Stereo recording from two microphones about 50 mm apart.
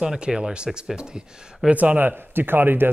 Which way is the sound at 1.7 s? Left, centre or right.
Right.